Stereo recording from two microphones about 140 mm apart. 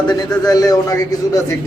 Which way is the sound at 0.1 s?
25° left (ahead or behind).